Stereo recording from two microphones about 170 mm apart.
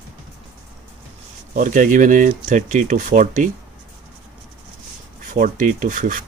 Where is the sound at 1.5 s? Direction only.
50° right (ahead or behind).